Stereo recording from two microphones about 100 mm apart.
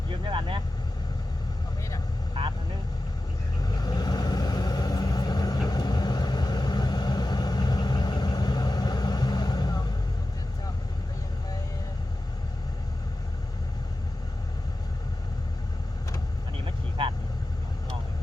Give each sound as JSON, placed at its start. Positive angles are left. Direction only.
{"t": 0.3, "sound": "vehicle", "side_deg": -60}
{"t": 3.6, "sound": "vehicle", "side_deg": 40}
{"t": 16.6, "sound": "vehicle", "side_deg": -60}